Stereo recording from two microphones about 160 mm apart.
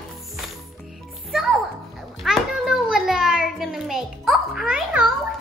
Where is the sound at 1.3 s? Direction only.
5° right (ahead or behind).